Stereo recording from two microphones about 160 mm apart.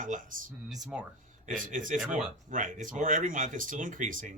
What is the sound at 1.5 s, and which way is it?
Speech, 55° right (ahead or behind).